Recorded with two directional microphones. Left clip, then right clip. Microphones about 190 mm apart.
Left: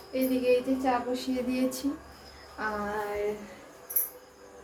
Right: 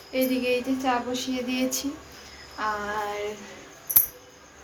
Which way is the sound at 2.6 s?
10° left (ahead or behind).